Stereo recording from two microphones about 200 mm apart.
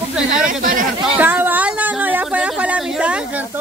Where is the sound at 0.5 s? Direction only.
45° right (ahead or behind).